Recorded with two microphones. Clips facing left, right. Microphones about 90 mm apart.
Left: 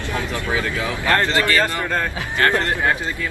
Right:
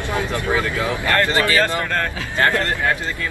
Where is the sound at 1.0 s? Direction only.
20° left (ahead or behind).